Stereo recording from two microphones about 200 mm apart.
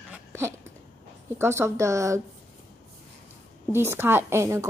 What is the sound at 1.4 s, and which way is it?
Speech, 15° right (ahead or behind).